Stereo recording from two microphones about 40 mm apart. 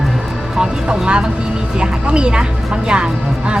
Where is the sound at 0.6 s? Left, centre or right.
Right.